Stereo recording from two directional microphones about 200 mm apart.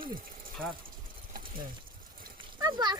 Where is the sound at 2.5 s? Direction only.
20° right (ahead or behind).